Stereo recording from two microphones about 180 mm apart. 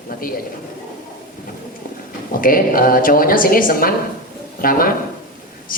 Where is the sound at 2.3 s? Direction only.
50° left (ahead or behind).